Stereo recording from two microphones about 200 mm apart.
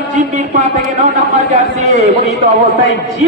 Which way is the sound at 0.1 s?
40° right (ahead or behind).